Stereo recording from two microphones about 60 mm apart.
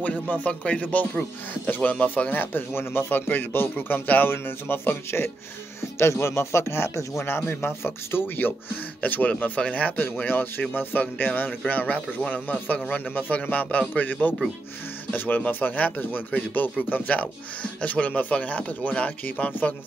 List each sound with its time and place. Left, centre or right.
0.0 s speech: left